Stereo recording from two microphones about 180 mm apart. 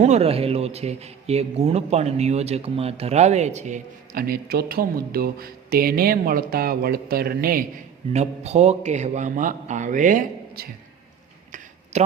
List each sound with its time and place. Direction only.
0.0 s a man's voice: 35° right (ahead or behind); by 7.6 s 55° right (ahead or behind)
8.1 s a man's voice: 35° right (ahead or behind); by 10.7 s 55° right (ahead or behind)
11.9 s a man's voice: 40° right (ahead or behind)